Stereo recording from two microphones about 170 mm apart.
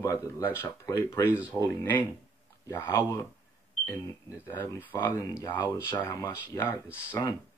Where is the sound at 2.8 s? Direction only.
15° left (ahead or behind).